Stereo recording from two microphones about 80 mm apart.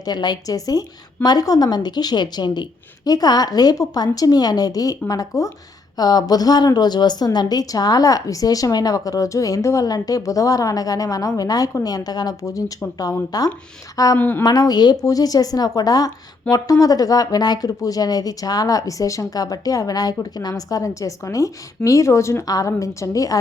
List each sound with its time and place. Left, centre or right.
0.0 s a woman's voice: left
14.2 s a woman's voice: left
14.4 s a woman's voice: left
15.0 s a woman's voice: left